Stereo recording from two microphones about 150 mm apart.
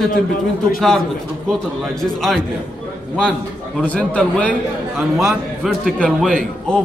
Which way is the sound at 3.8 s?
10° left (ahead or behind).